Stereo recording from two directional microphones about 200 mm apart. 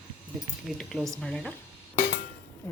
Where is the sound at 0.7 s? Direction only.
Centre (ahead or behind).